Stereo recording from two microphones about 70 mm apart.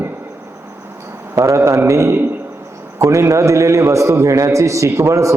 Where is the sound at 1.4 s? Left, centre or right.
Right.